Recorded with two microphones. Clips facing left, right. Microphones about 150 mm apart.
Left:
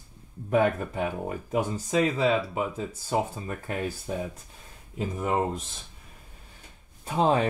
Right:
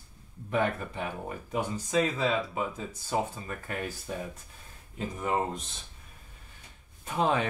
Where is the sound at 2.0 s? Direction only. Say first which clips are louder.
Left 4 dB; 10° left (ahead or behind).